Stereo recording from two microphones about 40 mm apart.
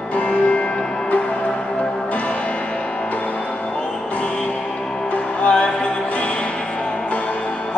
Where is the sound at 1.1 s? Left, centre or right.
Left.